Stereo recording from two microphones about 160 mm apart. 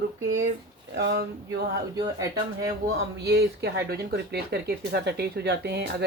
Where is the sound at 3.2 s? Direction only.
90° right.